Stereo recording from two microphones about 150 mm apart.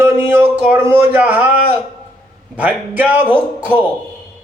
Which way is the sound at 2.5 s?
10° right (ahead or behind).